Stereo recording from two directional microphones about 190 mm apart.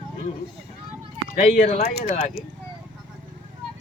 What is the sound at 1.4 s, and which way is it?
Speech, 35° left (ahead or behind).